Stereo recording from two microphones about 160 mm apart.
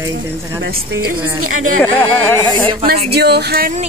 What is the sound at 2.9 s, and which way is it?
Speech, 90° right.